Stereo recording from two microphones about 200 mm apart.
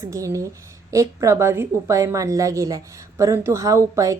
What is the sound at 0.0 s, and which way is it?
A woman's voice, 15° right (ahead or behind).